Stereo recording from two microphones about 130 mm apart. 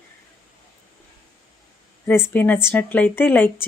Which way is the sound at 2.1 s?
15° left (ahead or behind).